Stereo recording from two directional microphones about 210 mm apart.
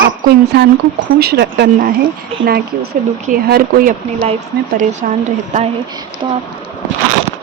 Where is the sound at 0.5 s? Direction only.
50° right (ahead or behind).